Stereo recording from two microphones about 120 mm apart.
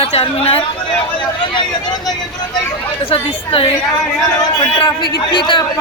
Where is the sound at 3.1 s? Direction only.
50° left (ahead or behind).